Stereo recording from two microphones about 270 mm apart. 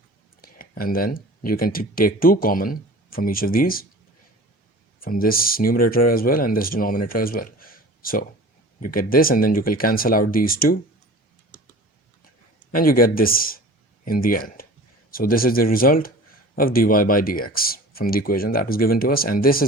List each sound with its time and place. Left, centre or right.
0.4 s speech: left
4.9 s speech: left
12.7 s speech: left